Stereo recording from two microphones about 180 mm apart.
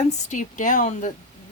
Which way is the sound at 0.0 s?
40° left (ahead or behind).